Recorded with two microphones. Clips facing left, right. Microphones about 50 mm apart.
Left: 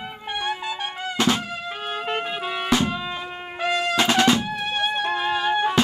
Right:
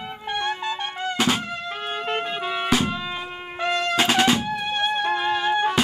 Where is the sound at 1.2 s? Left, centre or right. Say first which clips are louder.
Left 1 dB; centre.